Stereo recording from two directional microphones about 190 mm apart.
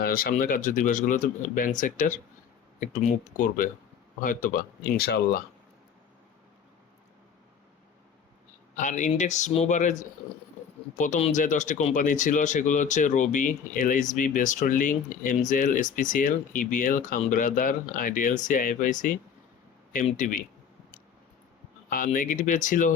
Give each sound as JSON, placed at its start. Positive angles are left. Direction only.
{"t": 0.0, "sound": "speech", "side_deg": 50}
{"t": 3.3, "sound": "speech", "side_deg": 45}
{"t": 8.7, "sound": "speech", "side_deg": 40}
{"t": 21.8, "sound": "speech", "side_deg": 45}